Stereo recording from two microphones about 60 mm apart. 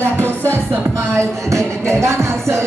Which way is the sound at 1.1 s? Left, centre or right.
Right.